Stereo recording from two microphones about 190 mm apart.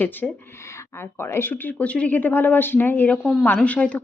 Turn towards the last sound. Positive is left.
turn(degrees=5)  # may be behind; listen again after turning